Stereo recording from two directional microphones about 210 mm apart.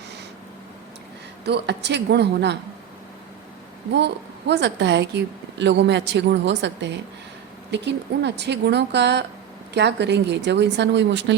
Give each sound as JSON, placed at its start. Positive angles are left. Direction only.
{"t": 1.5, "sound": "a woman's voice", "side_deg": -55}
{"t": 3.9, "sound": "a woman's voice", "side_deg": -55}